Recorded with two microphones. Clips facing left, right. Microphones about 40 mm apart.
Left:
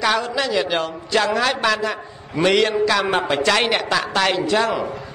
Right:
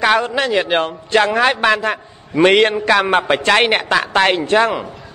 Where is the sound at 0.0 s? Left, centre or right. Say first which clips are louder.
Right 5 dB; right.